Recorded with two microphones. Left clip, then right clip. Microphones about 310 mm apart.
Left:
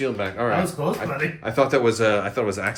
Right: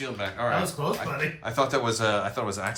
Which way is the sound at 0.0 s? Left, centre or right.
Centre.